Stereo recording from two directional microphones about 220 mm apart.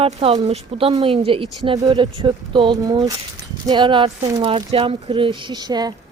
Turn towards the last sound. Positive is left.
turn(degrees=-20)  # may be behind; listen again after turning